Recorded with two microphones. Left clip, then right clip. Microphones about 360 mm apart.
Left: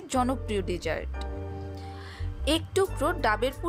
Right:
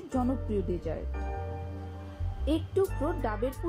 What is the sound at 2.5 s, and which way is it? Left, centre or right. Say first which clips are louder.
A woman's voice: left 3 dB; left.